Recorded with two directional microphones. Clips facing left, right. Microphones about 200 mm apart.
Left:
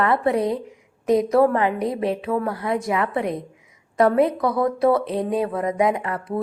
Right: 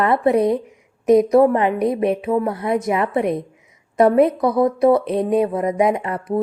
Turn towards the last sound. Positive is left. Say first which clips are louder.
# right 3 dB
turn(degrees=-20)  # may be behind; listen again after turning